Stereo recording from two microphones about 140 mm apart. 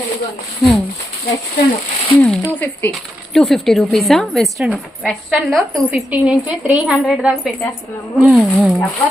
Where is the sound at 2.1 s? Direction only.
10° left (ahead or behind).